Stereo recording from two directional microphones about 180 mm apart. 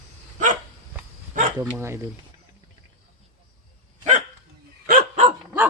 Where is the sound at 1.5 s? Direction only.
15° right (ahead or behind).